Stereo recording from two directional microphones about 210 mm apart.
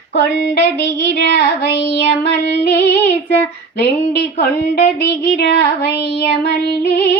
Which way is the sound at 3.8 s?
50° left (ahead or behind).